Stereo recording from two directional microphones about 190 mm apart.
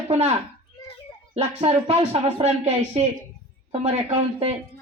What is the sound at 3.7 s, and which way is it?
Speech, 30° right (ahead or behind).